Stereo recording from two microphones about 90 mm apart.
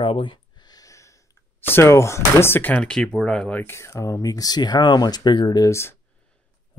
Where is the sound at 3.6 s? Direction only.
30° left (ahead or behind); by 5.6 s 55° left (ahead or behind).